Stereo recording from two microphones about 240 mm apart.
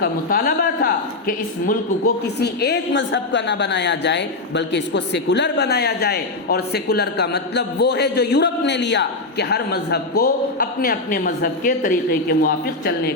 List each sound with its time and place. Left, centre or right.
0.0 s a woman's voice: left